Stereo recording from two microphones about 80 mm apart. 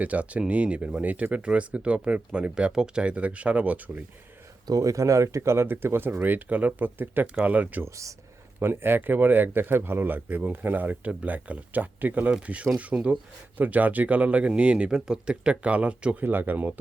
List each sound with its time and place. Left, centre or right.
0.0 s speech: centre
4.6 s speech: right